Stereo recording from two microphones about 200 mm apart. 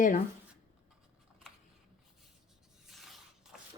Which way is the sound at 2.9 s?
Centre (ahead or behind).